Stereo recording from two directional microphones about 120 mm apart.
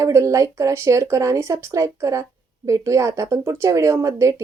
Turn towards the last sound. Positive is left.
turn(degrees=-25)  # may be behind; listen again after turning